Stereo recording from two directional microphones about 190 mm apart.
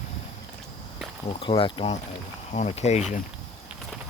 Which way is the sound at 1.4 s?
25° left (ahead or behind).